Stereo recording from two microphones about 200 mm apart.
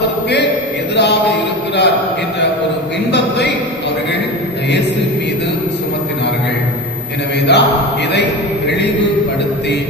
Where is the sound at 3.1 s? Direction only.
60° left (ahead or behind).